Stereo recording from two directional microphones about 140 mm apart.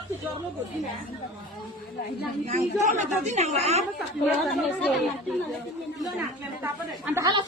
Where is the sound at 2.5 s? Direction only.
60° right (ahead or behind).